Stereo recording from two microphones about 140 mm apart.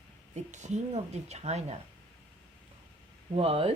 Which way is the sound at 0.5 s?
60° right (ahead or behind).